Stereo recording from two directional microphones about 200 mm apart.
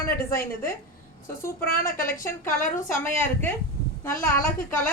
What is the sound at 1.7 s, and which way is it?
Speech, 45° left (ahead or behind).